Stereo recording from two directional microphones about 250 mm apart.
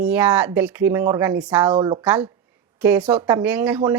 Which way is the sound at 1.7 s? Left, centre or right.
Centre.